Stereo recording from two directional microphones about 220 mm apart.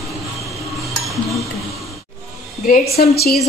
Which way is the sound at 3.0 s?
45° left (ahead or behind).